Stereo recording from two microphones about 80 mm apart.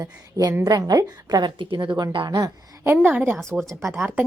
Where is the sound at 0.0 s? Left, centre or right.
Right.